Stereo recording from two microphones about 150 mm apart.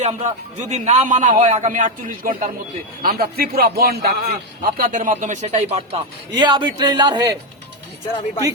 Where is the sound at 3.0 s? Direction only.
80° right.